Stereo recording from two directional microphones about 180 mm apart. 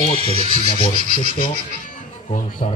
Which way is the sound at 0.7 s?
30° left (ahead or behind).